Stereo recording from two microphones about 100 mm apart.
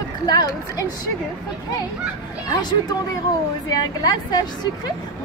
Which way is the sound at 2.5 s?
45° left (ahead or behind).